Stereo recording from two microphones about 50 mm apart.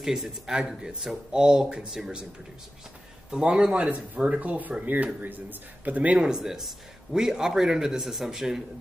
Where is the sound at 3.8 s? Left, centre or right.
Right.